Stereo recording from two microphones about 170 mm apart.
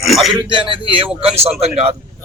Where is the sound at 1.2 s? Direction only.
35° right (ahead or behind).